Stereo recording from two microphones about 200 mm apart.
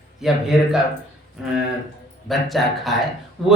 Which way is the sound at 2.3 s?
Centre (ahead or behind).